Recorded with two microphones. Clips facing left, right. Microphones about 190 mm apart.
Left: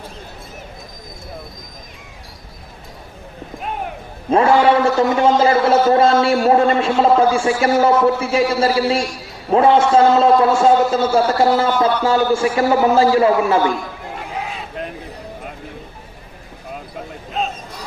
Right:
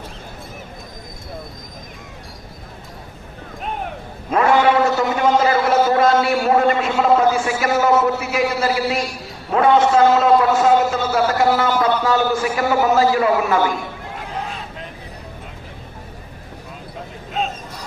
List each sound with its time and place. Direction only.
4.3 s a man's voice: 30° left (ahead or behind)